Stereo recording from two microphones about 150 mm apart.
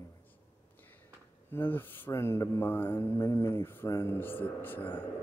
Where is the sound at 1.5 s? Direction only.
15° left (ahead or behind).